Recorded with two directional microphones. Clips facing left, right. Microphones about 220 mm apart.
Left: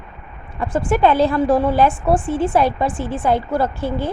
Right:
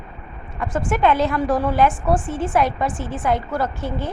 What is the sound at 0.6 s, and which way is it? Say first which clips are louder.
A woman's voice: left 4 dB; 30° left (ahead or behind).